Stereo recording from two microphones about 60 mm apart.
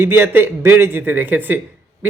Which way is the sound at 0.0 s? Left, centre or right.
Right.